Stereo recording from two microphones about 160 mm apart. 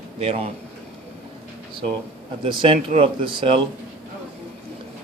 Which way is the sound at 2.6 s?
35° right (ahead or behind).